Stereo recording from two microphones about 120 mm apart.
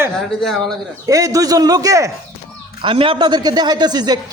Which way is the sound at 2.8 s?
45° right (ahead or behind).